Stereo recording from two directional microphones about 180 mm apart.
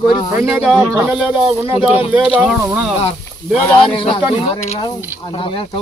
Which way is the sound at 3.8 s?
30° left (ahead or behind).